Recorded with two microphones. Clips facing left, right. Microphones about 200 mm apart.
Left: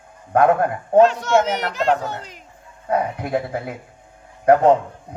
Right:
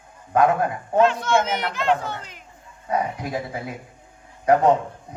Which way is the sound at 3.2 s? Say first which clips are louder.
Left 5 dB; 60° left (ahead or behind).